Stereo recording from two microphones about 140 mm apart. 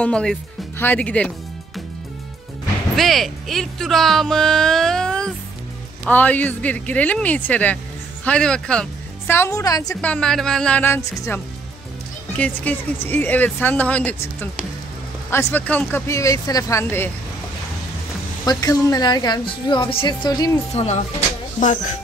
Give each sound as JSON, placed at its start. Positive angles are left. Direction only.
{"t": 0.0, "sound": "speech", "side_deg": 5}
{"t": 3.0, "sound": "speech", "side_deg": 0}
{"t": 9.3, "sound": "speech", "side_deg": 20}
{"t": 10.0, "sound": "speech", "side_deg": 5}
{"t": 18.4, "sound": "speech", "side_deg": 25}
{"t": 20.7, "sound": "speech", "side_deg": 50}